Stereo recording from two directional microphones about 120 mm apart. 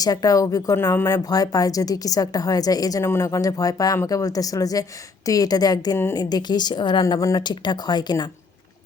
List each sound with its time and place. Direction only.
0.0 s a woman's voice: 30° left (ahead or behind)